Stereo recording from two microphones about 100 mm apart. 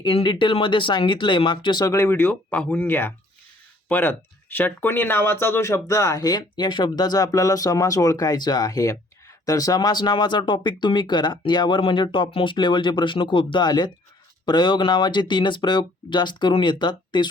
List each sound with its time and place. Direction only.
0.0 s speech: 55° left (ahead or behind)
1.8 s speech: 35° left (ahead or behind)
2.0 s speech: 20° left (ahead or behind); by 17.2 s 50° left (ahead or behind)